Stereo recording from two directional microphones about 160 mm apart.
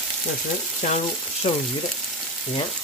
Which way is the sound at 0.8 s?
45° left (ahead or behind).